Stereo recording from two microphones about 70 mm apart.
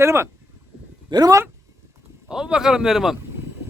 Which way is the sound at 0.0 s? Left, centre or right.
Right.